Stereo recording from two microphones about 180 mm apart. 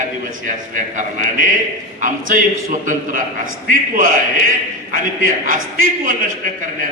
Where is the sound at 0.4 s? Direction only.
45° right (ahead or behind).